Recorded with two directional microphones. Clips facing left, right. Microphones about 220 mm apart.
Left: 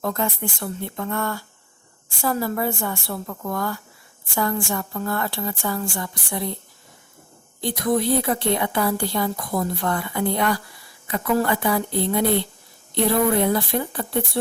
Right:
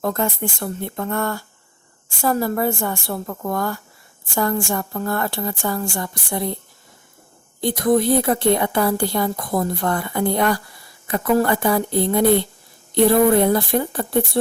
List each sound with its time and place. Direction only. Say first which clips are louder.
0.0 s a woman's voice: right 3 dB; 45° right (ahead or behind)
7.6 s a woman's voice: right 4 dB; 45° right (ahead or behind)